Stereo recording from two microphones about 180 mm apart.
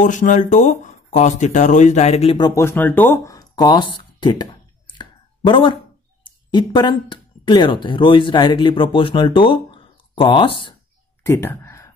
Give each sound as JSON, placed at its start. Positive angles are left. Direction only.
{"t": 0.0, "sound": "speech", "side_deg": 45}
{"t": 4.9, "sound": "a sound", "side_deg": 25}
{"t": 6.2, "sound": "speech", "side_deg": 25}
{"t": 11.2, "sound": "speech", "side_deg": 15}